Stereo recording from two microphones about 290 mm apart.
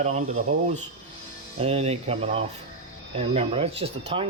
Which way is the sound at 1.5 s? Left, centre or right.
Right.